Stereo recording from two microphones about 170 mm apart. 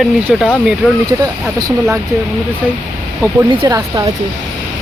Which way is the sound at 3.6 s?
20° right (ahead or behind).